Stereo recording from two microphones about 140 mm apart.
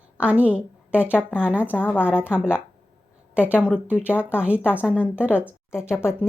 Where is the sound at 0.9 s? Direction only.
15° left (ahead or behind).